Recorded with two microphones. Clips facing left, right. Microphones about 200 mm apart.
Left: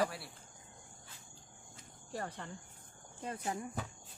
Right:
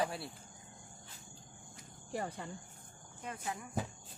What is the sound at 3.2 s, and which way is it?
Speech, 35° left (ahead or behind).